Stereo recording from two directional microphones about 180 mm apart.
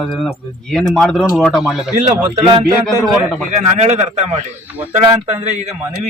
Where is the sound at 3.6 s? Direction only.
40° right (ahead or behind).